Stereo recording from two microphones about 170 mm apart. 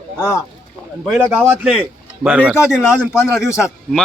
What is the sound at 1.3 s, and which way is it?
A man's voice, 5° right (ahead or behind).